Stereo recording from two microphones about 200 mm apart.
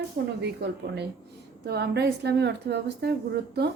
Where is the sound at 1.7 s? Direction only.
55° right (ahead or behind).